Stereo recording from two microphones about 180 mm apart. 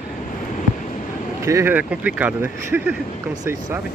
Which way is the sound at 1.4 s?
15° right (ahead or behind).